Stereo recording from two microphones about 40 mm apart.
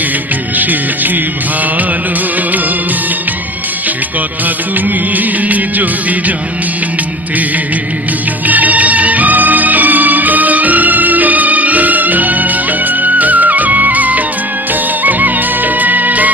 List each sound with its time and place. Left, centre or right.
0.5 s music: right
5.1 s music: right
8.4 s music: right